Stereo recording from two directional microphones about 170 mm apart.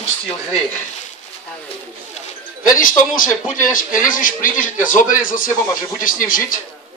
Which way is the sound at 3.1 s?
50° left (ahead or behind).